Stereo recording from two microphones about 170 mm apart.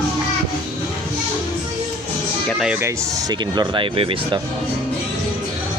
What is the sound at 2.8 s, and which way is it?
Speech, 20° right (ahead or behind).